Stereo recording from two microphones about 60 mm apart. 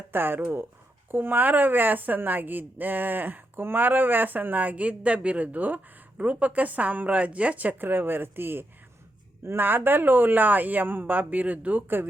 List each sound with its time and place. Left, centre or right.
0.1 s a woman's voice: right